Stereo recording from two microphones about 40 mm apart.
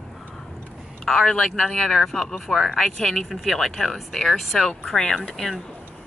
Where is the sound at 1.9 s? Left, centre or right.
Centre.